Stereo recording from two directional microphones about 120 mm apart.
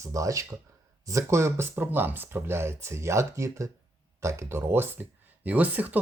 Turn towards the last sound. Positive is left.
turn(degrees=-15)  # may be behind; listen again after turning